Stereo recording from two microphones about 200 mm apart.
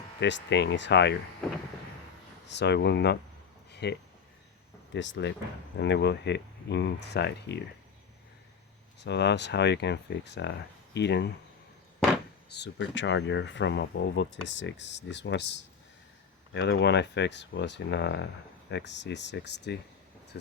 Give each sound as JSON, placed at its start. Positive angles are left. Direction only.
{"t": 0.2, "sound": "speech", "side_deg": 60}
{"t": 2.5, "sound": "speech", "side_deg": 60}
{"t": 3.7, "sound": "a sound", "side_deg": 55}
{"t": 4.9, "sound": "speech", "side_deg": 65}
{"t": 9.0, "sound": "speech", "side_deg": 60}
{"t": 12.5, "sound": "speech", "side_deg": 60}